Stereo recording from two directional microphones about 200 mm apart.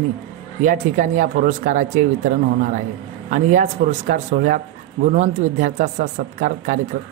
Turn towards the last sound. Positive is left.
turn(degrees=-40)  # may be behind; listen again after turning